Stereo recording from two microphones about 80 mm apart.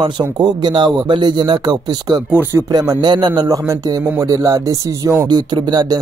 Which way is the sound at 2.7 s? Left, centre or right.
Right.